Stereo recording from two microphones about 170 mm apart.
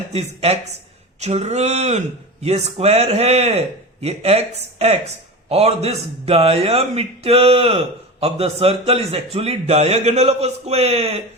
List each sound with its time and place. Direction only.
0.1 s speech: 40° right (ahead or behind)